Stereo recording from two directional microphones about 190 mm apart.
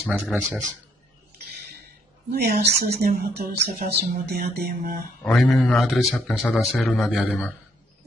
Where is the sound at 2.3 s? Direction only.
55° right (ahead or behind).